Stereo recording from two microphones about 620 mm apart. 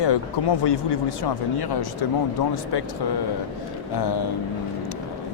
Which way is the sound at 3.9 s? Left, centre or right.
Left.